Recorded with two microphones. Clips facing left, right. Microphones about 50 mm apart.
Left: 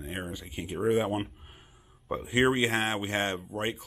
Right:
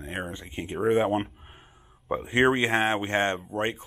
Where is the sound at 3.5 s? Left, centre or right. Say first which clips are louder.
Right 5 dB; right.